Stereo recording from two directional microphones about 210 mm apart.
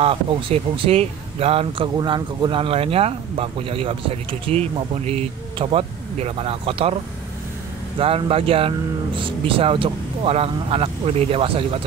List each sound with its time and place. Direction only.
0.0 s speech: 25° right (ahead or behind)
8.0 s speech: 25° right (ahead or behind)